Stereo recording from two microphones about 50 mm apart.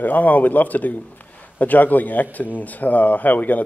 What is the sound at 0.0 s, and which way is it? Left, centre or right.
Speech, left.